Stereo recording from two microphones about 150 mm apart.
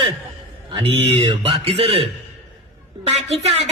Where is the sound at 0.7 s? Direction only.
35° right (ahead or behind).